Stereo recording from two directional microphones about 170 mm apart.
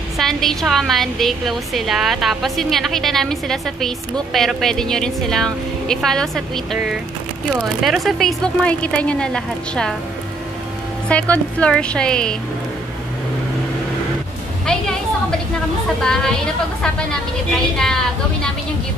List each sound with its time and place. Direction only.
0.2 s a woman's voice: centre (ahead or behind)
11.1 s a woman's voice: 10° left (ahead or behind)
14.7 s a sound: 5° left (ahead or behind)
16.0 s a woman's voice: 5° left (ahead or behind)